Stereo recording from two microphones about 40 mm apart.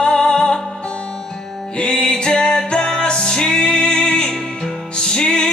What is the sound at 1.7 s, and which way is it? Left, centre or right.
Music, left.